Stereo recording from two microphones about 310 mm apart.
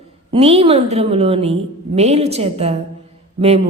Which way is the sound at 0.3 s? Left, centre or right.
Centre.